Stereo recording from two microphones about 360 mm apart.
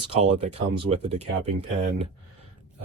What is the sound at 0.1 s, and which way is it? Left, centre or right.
Speech, centre.